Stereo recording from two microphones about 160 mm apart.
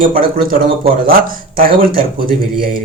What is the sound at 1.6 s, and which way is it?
Speech, 60° right (ahead or behind).